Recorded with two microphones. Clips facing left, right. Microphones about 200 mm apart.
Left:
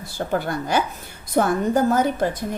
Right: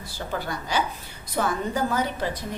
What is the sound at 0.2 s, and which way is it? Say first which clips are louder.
A woman's voice: left 7 dB; 55° left (ahead or behind).